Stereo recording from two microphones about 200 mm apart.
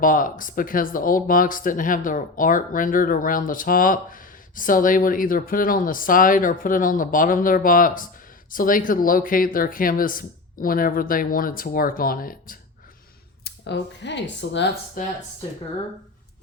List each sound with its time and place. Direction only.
0.0 s speech: 45° left (ahead or behind)
13.4 s speech: 60° left (ahead or behind)
15.0 s speech: 45° left (ahead or behind)